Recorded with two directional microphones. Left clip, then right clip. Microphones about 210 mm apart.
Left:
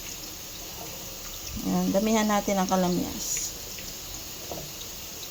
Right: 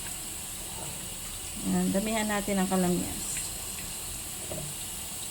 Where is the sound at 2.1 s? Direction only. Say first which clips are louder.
Left 5 dB; 20° left (ahead or behind).